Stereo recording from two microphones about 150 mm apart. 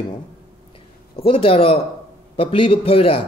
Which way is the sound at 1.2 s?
35° left (ahead or behind).